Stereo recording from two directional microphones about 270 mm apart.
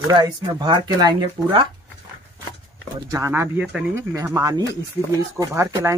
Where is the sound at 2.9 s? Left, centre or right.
Centre.